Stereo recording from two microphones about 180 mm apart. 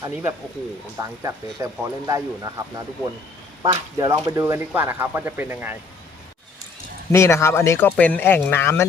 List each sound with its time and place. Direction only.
0.0 s speech: 15° right (ahead or behind)
7.1 s speech: 15° left (ahead or behind)